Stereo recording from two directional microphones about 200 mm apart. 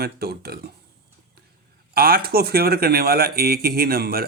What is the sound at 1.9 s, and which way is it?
Speech, 50° right (ahead or behind).